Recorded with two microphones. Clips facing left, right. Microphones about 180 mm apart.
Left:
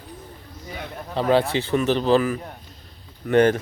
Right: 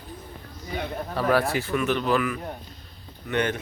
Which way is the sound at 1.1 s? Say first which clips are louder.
Left 4 dB; 25° left (ahead or behind).